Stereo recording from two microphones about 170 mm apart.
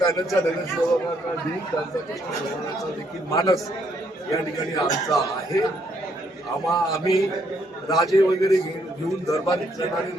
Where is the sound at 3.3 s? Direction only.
20° left (ahead or behind).